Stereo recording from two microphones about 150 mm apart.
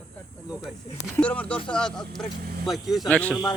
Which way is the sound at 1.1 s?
10° left (ahead or behind).